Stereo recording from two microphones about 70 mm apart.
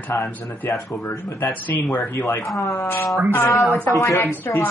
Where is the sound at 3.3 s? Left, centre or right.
Left.